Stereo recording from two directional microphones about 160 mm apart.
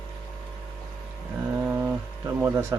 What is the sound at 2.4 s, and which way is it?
Speech, 15° right (ahead or behind).